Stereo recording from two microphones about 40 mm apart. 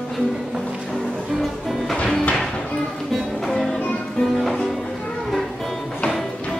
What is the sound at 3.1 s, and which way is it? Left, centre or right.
Music, centre.